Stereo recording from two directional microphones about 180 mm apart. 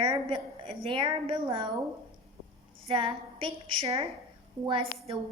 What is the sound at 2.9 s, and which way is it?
A woman's voice, 30° right (ahead or behind).